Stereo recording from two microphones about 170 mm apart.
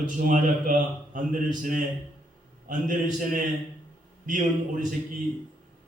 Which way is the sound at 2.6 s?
55° right (ahead or behind).